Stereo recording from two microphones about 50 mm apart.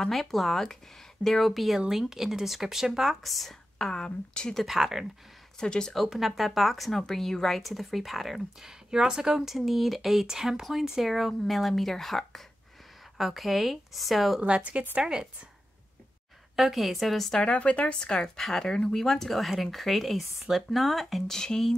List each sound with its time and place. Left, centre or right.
0.0 s speech: centre
4.6 s speech: centre
5.6 s speech: centre
5.9 s speech: centre
8.9 s speech: centre
14.4 s speech: right
15.0 s speech: centre
16.5 s speech: centre
17.3 s a woman's voice: left